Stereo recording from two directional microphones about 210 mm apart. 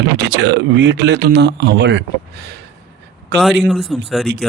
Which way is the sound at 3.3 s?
Centre (ahead or behind).